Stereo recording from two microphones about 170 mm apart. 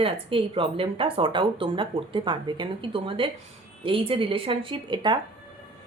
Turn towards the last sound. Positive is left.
turn(degrees=-25)  # may be behind; listen again after turning